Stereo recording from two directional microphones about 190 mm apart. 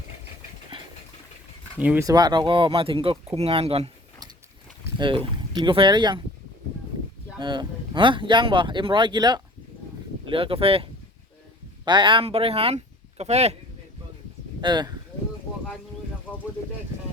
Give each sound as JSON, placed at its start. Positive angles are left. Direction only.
{"t": 1.8, "sound": "speech", "side_deg": -10}
{"t": 2.0, "sound": "speech", "side_deg": -20}
{"t": 4.9, "sound": "speech", "side_deg": -25}
{"t": 7.3, "sound": "speech", "side_deg": -25}
{"t": 11.9, "sound": "speech", "side_deg": -25}
{"t": 14.6, "sound": "speech", "side_deg": -25}